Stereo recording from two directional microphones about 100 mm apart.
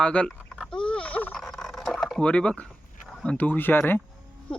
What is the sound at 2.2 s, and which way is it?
Speech, 10° left (ahead or behind).